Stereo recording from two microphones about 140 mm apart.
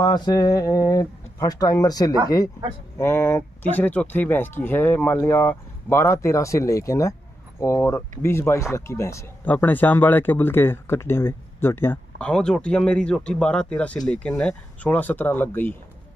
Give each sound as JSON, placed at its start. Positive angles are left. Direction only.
{"t": 0.0, "sound": "speech", "side_deg": 30}